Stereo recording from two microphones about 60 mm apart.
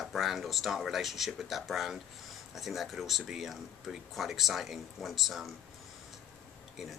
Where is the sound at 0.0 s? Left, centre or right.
Centre.